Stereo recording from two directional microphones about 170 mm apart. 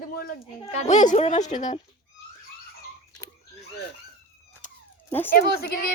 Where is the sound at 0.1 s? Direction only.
60° left (ahead or behind).